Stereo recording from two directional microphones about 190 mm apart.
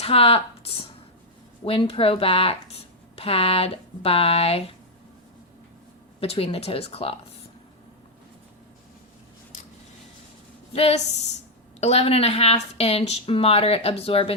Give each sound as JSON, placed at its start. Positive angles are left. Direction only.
{"t": 0.0, "sound": "a woman's voice", "side_deg": 30}
{"t": 6.1, "sound": "a woman's voice", "side_deg": 30}
{"t": 10.7, "sound": "a woman's voice", "side_deg": 35}